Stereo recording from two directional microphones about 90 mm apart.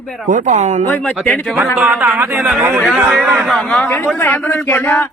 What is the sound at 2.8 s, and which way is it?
Speech, centre (ahead or behind).